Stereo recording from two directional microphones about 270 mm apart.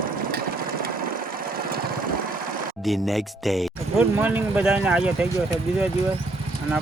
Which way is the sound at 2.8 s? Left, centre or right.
Centre.